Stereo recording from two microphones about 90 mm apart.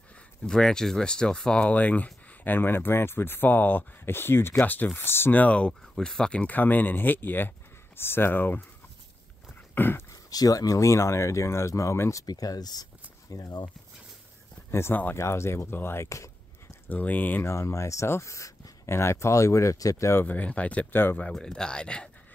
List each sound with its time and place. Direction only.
0.5 s speech: 5° left (ahead or behind); by 8.6 s 20° left (ahead or behind)
9.8 s speech: 25° left (ahead or behind)
10.3 s speech: 45° left (ahead or behind)
14.7 s speech: 25° left (ahead or behind)
16.8 s speech: 20° left (ahead or behind)
20.2 s speech: 15° left (ahead or behind)
21.3 s speech: 10° left (ahead or behind)